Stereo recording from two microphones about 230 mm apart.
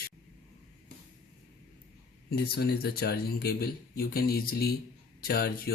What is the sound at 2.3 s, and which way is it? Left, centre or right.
Speech, left.